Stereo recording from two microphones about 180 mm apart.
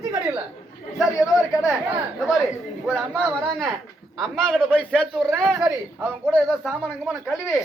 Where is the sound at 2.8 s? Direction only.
5° right (ahead or behind).